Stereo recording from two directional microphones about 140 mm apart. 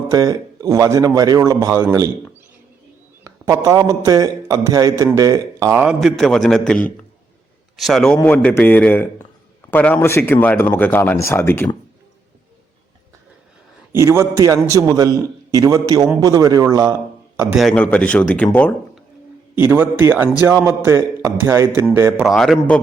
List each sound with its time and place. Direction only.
0.1 s speech: 25° right (ahead or behind)
3.2 s speech: 20° right (ahead or behind)
5.8 s a man's voice: 5° right (ahead or behind); by 11.7 s 15° left (ahead or behind)
13.9 s a man's voice: 20° right (ahead or behind)
17.5 s a man's voice: centre (ahead or behind)
17.7 s speech: 10° left (ahead or behind)
19.5 s a man's voice: 15° right (ahead or behind)
22.3 s a man's voice: 5° left (ahead or behind)